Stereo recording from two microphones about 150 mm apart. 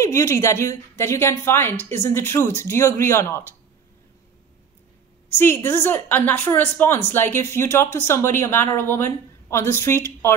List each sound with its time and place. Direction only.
0.0 s a woman's voice: 20° left (ahead or behind)
5.3 s a woman's voice: 15° left (ahead or behind)